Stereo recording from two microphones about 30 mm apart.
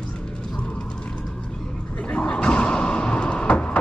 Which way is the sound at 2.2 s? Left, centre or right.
Left.